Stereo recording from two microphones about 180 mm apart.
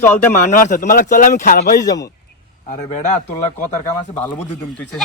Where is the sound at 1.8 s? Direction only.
20° left (ahead or behind).